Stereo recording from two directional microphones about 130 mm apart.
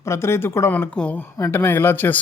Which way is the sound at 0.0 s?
20° left (ahead or behind).